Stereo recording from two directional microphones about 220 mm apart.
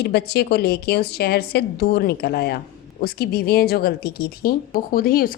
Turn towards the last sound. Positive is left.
turn(degrees=40)  # may be behind; listen again after turning